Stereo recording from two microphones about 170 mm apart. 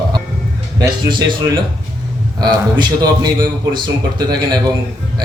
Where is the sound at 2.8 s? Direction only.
25° right (ahead or behind).